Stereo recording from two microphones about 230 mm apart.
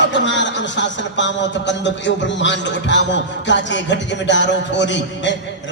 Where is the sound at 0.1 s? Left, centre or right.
Left.